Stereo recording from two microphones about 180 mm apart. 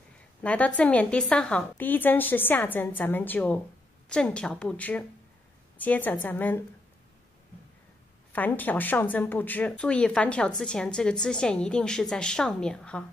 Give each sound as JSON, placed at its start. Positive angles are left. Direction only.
{"t": 0.4, "sound": "a woman's voice", "side_deg": 5}
{"t": 8.3, "sound": "a woman's voice", "side_deg": 10}